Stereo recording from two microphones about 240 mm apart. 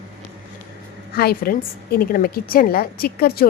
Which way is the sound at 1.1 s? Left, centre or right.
Left.